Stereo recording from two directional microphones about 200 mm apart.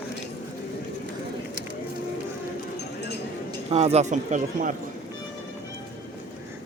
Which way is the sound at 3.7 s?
35° right (ahead or behind).